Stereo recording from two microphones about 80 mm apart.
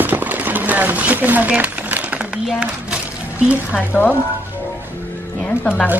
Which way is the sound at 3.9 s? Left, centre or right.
Left.